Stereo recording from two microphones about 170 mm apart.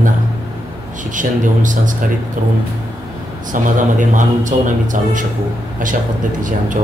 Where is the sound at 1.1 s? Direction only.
50° right (ahead or behind).